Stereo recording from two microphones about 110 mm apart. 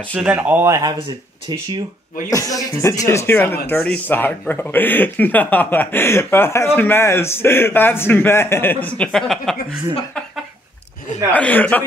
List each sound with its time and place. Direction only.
0.1 s speech: 15° right (ahead or behind)
0.7 s speech: 30° right (ahead or behind)
2.2 s speech: 30° left (ahead or behind); by 9.6 s 5° left (ahead or behind)
11.3 s speech: 15° left (ahead or behind)